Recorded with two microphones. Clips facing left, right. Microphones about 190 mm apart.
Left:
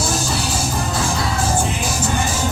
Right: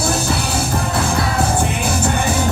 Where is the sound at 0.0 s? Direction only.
60° right (ahead or behind).